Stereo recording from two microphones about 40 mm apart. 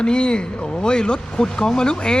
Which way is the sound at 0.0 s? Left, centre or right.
Left.